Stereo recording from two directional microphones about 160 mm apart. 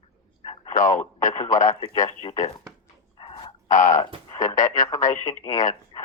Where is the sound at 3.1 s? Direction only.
30° left (ahead or behind).